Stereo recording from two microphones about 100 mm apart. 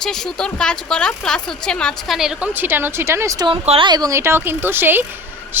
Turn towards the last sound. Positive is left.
turn(degrees=-20)  # may be behind; listen again after turning